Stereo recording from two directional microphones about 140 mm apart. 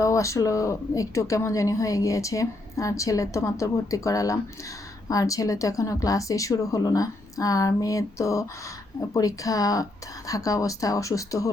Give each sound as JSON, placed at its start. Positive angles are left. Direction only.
{"t": 0.0, "sound": "a woman's voice", "side_deg": 20}